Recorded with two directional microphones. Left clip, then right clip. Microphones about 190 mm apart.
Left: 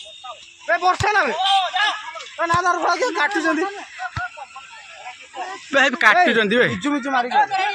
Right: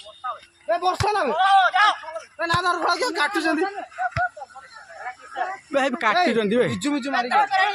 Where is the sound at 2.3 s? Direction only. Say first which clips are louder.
Left 3 dB; 35° left (ahead or behind).